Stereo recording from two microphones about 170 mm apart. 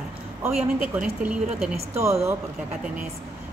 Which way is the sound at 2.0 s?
15° right (ahead or behind).